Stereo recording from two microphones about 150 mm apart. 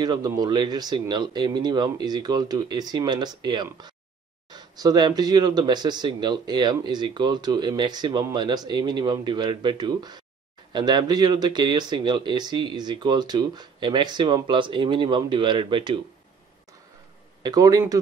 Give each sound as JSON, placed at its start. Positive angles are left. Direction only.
{"t": 0.0, "sound": "speech", "side_deg": -30}
{"t": 17.4, "sound": "speech", "side_deg": -25}